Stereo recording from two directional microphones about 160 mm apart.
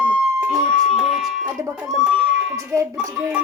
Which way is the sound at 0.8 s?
Centre (ahead or behind).